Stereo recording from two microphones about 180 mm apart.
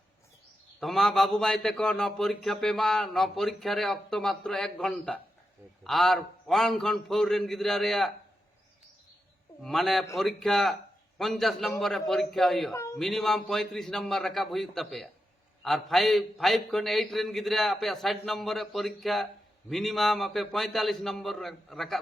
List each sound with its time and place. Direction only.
0.8 s a man's voice: centre (ahead or behind)
9.6 s a man's voice: centre (ahead or behind)